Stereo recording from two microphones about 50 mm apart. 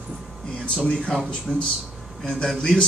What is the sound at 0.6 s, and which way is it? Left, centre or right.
A man's voice, left.